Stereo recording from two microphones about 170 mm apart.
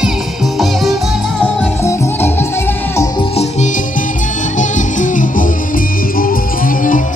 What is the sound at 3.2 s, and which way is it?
Music, 35° left (ahead or behind).